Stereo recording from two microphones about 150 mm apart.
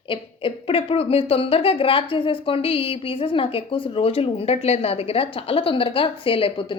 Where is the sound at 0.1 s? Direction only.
35° left (ahead or behind).